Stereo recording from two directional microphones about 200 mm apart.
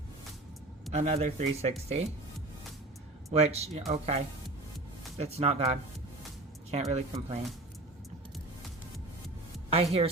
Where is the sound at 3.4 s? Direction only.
30° right (ahead or behind).